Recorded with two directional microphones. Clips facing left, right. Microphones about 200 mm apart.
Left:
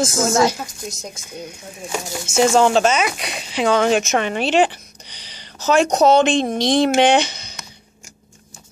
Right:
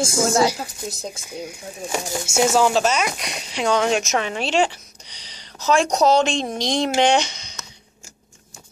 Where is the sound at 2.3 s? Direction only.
10° right (ahead or behind).